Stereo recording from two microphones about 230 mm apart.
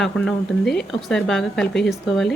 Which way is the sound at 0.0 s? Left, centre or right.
Centre.